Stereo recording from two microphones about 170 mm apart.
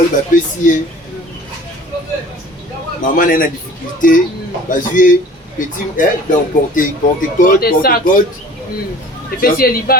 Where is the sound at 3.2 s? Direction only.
55° left (ahead or behind).